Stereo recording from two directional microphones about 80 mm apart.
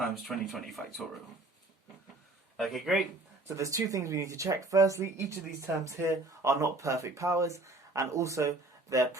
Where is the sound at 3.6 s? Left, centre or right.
Right.